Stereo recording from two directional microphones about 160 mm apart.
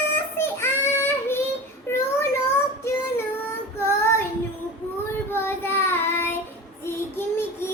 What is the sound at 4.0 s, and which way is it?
Child singing, 15° left (ahead or behind).